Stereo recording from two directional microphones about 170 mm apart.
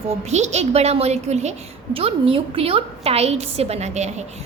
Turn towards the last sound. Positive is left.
turn(degrees=-40)  # may be behind; listen again after turning